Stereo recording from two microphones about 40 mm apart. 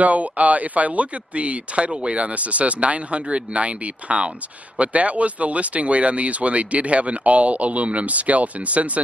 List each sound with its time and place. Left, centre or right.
0.0 s speech: right